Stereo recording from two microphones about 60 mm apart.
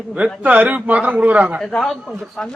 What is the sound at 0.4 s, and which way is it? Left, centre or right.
A man's voice, right.